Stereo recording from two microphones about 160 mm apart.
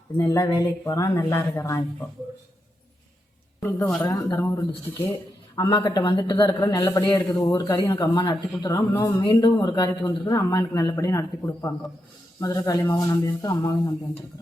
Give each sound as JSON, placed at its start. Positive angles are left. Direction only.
{"t": 0.2, "sound": "speech", "side_deg": 20}
{"t": 3.6, "sound": "speech", "side_deg": 15}